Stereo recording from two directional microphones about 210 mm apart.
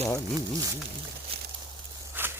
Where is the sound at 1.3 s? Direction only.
25° right (ahead or behind).